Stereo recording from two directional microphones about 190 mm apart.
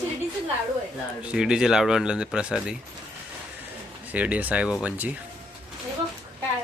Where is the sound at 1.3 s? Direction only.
5° right (ahead or behind).